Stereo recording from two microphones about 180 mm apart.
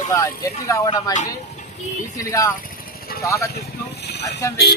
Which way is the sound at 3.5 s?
65° left (ahead or behind).